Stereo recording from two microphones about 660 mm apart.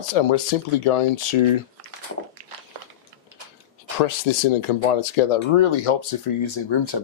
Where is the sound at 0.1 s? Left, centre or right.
Left.